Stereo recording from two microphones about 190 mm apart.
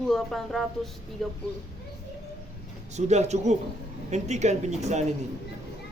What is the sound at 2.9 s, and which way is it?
Speech, 35° right (ahead or behind).